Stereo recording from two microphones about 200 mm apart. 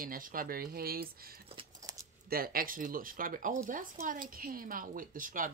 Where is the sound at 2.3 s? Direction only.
45° right (ahead or behind).